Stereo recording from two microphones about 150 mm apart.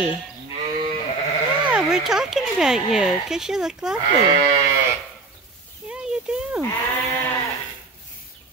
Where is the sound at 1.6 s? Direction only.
5° right (ahead or behind).